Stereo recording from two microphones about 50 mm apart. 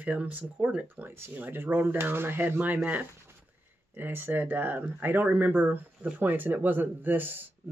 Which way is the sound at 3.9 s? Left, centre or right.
Right.